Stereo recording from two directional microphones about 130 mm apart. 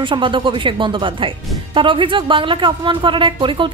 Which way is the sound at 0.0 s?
40° right (ahead or behind).